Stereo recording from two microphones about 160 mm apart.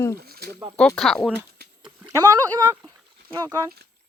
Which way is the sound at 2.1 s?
25° right (ahead or behind).